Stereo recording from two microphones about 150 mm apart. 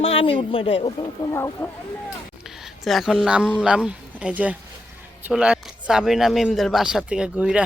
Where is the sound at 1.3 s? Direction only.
15° left (ahead or behind).